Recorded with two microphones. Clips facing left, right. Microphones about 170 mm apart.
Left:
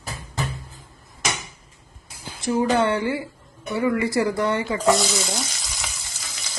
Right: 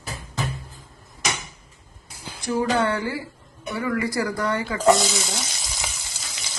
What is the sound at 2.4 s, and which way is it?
Speech, 25° left (ahead or behind).